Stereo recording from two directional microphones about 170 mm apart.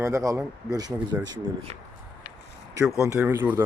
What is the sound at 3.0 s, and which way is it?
Speech, 15° right (ahead or behind).